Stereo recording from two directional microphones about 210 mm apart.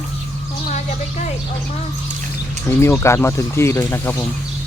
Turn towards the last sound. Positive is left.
turn(degrees=10)  # may be behind; listen again after turning